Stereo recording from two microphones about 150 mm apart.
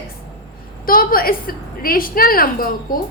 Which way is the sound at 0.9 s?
75° left (ahead or behind).